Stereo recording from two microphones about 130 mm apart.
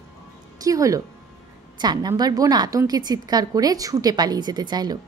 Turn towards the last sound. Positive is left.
turn(degrees=-30)  # may be behind; listen again after turning